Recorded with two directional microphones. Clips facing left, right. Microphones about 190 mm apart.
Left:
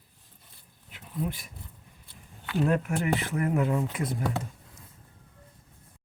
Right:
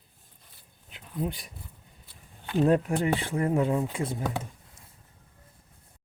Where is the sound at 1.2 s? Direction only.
30° right (ahead or behind).